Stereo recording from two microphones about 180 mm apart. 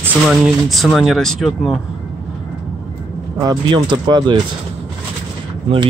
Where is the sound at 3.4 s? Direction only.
20° right (ahead or behind).